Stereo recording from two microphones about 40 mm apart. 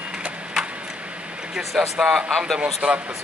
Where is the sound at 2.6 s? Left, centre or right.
Right.